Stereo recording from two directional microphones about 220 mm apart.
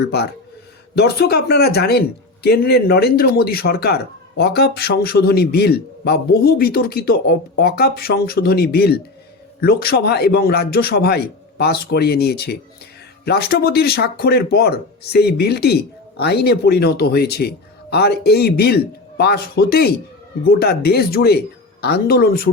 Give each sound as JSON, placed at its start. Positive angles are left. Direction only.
{"t": 0.1, "sound": "a man's voice", "side_deg": 50}